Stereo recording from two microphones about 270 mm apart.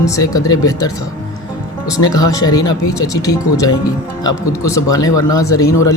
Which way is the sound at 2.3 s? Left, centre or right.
Centre.